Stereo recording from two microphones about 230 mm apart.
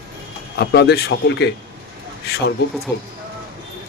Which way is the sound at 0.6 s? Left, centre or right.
Left.